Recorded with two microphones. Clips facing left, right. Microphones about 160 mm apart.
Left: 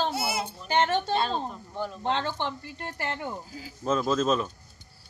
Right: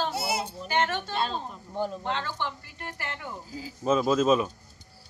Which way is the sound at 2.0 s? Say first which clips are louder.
Left 3 dB; 25° left (ahead or behind).